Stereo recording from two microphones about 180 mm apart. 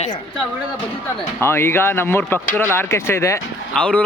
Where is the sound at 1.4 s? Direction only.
15° left (ahead or behind).